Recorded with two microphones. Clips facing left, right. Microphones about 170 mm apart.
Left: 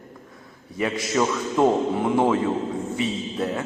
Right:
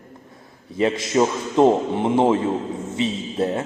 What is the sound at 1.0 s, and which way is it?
A man's voice, 25° right (ahead or behind).